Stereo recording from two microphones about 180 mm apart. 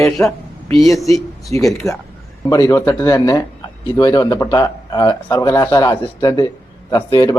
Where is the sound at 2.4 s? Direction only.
20° left (ahead or behind).